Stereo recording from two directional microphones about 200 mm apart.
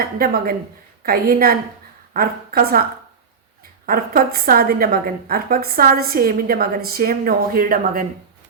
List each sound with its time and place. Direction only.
0.0 s a woman's voice: 50° right (ahead or behind)
3.8 s a woman's voice: 45° right (ahead or behind)